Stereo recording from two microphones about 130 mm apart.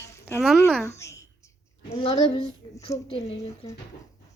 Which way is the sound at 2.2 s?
40° left (ahead or behind).